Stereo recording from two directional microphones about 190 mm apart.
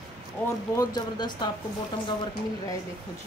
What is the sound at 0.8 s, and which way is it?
Speech, 20° left (ahead or behind).